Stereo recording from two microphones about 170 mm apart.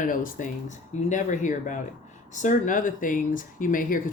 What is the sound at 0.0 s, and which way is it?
Speech, 50° left (ahead or behind).